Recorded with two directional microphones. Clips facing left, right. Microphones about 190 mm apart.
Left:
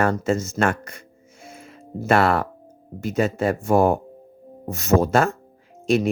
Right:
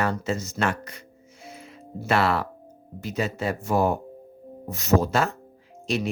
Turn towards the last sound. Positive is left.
turn(degrees=50)  # may be behind; listen again after turning